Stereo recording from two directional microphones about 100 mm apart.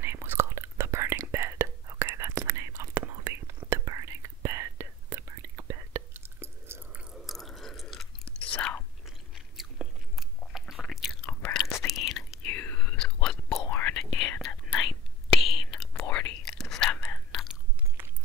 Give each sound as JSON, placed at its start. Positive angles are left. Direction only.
{"t": 0.0, "sound": "whispering", "side_deg": -25}
{"t": 6.9, "sound": "chewing", "side_deg": -10}
{"t": 7.2, "sound": "chewing", "side_deg": 0}
{"t": 9.0, "sound": "chewing", "side_deg": -5}
{"t": 11.2, "sound": "chewing", "side_deg": 10}
{"t": 11.8, "sound": "whispering", "side_deg": 0}
{"t": 12.4, "sound": "whispering", "side_deg": 20}
{"t": 13.7, "sound": "whispering", "side_deg": 20}
{"t": 13.9, "sound": "whispering", "side_deg": 5}
{"t": 16.9, "sound": "whispering", "side_deg": 15}
{"t": 17.3, "sound": "chewing", "side_deg": 0}
{"t": 18.0, "sound": "a sound", "side_deg": -20}